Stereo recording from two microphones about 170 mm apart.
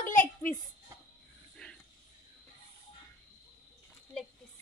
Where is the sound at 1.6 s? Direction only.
5° left (ahead or behind).